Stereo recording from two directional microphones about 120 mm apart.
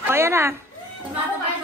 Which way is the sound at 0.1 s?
20° right (ahead or behind).